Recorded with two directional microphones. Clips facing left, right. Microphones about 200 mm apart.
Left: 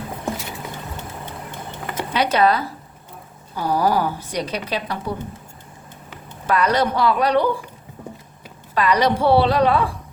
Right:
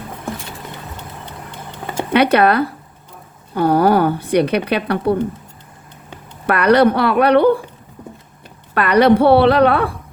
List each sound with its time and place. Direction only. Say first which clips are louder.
2.1 s speech: right 5 dB; 60° right (ahead or behind)
6.5 s speech: right 7 dB; 60° right (ahead or behind)
8.7 s speech: right 6 dB; 60° right (ahead or behind)